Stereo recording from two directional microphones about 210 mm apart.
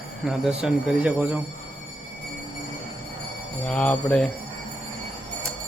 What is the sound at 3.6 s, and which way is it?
Speech, 5° left (ahead or behind).